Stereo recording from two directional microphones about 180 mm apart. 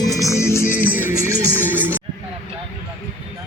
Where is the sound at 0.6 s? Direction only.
10° right (ahead or behind).